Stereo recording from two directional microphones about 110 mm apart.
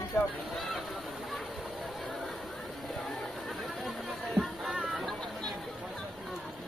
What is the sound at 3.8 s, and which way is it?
Chatter, centre (ahead or behind).